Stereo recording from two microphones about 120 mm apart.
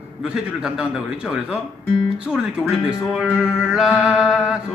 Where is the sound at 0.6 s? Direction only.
5° right (ahead or behind).